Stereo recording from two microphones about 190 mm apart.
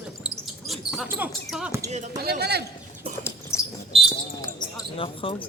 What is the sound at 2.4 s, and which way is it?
Speech, 60° right (ahead or behind).